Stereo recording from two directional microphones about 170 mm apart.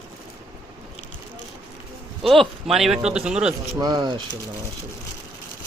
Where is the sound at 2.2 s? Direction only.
Centre (ahead or behind).